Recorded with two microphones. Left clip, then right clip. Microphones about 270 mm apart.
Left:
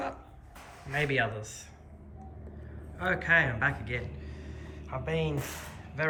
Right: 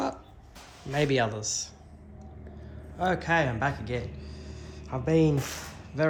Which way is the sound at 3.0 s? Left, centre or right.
Centre.